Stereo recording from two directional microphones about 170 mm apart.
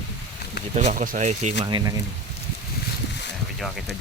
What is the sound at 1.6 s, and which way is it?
Speech, 25° right (ahead or behind).